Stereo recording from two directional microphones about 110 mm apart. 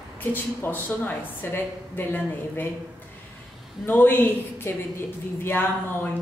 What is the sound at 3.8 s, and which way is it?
A woman's voice, 20° left (ahead or behind).